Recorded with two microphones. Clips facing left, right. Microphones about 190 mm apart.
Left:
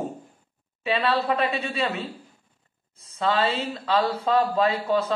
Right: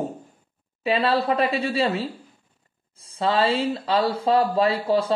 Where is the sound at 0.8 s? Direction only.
35° right (ahead or behind).